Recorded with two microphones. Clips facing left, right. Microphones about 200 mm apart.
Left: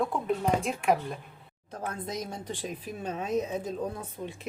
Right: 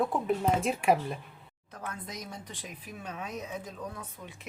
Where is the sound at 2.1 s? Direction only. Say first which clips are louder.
Left 7 dB; 30° left (ahead or behind).